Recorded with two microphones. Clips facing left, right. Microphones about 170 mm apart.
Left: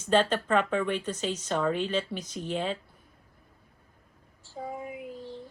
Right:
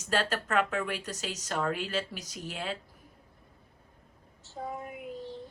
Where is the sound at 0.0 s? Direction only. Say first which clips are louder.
Left 6 dB; 10° right (ahead or behind).